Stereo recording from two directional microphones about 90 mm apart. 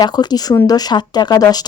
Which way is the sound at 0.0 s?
50° left (ahead or behind).